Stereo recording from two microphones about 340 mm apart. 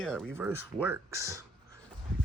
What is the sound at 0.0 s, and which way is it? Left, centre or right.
Speech, centre.